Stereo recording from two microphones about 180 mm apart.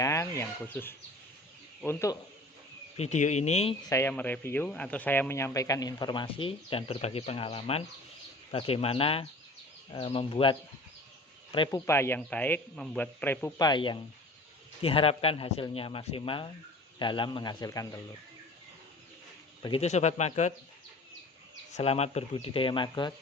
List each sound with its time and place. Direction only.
0.0 s bird: 15° left (ahead or behind)
1.8 s a man's voice: 15° left (ahead or behind)
3.0 s a man's voice: 40° left (ahead or behind)
3.8 s a man's voice: 15° left (ahead or behind)
11.9 s a man's voice: 15° left (ahead or behind)
13.6 s a man's voice: 25° left (ahead or behind)
19.6 s a man's voice: 35° left (ahead or behind)
21.7 s a man's voice: 35° left (ahead or behind)